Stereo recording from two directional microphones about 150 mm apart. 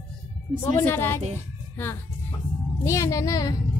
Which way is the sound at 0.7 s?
15° left (ahead or behind).